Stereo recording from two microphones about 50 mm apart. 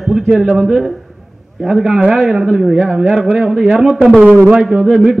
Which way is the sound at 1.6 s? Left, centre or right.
Centre.